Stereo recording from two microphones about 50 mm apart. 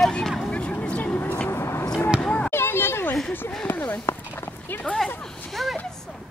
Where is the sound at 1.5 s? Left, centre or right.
Left.